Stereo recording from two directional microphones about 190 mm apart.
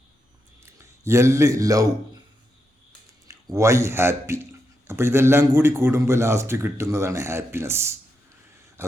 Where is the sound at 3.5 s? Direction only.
15° right (ahead or behind).